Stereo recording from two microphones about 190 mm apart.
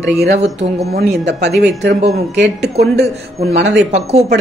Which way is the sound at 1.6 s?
65° right (ahead or behind).